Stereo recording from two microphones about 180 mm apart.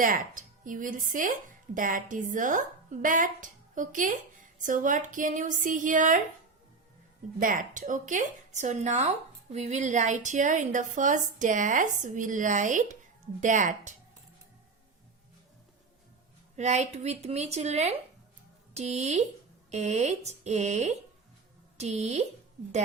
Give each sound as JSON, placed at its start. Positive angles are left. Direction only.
{"t": 0.0, "sound": "speech", "side_deg": -50}
{"t": 7.3, "sound": "speech", "side_deg": -50}
{"t": 16.6, "sound": "speech", "side_deg": -40}